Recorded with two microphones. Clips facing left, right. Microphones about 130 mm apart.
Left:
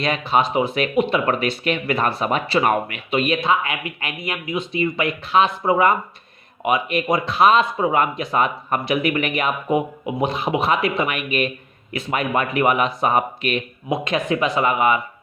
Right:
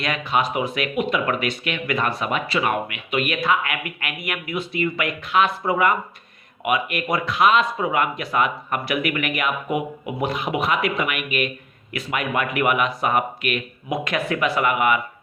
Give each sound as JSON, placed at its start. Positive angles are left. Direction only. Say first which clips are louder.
{"t": 0.0, "sound": "speech", "louder": "left 3 dB", "side_deg": 30}